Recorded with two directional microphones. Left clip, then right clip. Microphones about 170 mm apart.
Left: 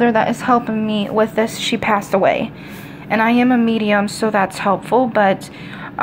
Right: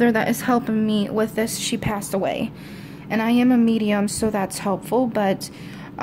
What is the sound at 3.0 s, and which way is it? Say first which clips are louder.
A woman's voice: left 5 dB; 25° right (ahead or behind).